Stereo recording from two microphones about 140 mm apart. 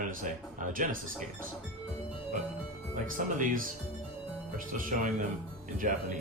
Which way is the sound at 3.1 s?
75° right (ahead or behind).